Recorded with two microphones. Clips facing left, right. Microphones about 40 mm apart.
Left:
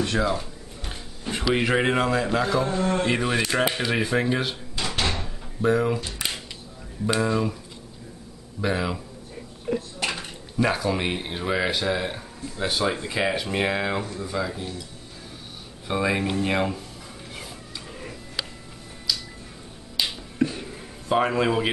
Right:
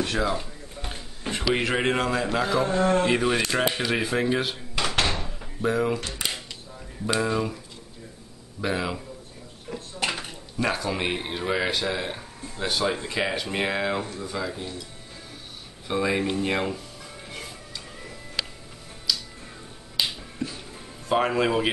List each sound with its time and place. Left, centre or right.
0.0 s speech: centre
4.7 s door: right
5.2 s door: centre
7.1 s speech: centre
8.5 s speech: centre
9.9 s a sound: centre
10.6 s speech: centre
15.9 s speech: centre
19.1 s music: centre
20.4 s music: left
21.1 s speech: centre